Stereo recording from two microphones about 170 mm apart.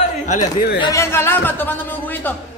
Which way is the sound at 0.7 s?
25° left (ahead or behind).